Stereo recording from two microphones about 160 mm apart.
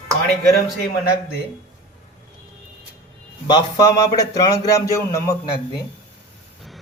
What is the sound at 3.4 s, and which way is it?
A man's voice, 25° left (ahead or behind).